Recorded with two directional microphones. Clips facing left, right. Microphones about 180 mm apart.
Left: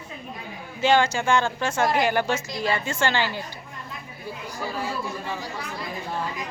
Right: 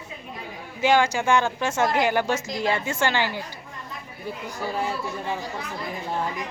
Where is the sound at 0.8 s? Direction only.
15° right (ahead or behind).